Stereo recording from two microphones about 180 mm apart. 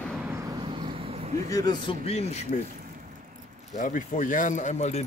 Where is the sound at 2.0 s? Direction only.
35° left (ahead or behind).